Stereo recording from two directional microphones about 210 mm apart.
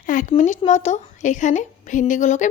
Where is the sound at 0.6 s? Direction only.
35° left (ahead or behind).